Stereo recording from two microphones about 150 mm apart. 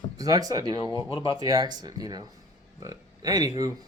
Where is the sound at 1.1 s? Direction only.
35° left (ahead or behind).